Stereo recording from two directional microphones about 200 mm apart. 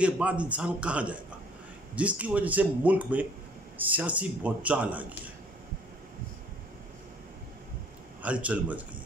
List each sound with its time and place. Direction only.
0.0 s speech: 5° right (ahead or behind)
8.2 s speech: 5° right (ahead or behind)